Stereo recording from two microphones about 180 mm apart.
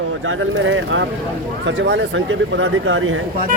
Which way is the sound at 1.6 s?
80° right.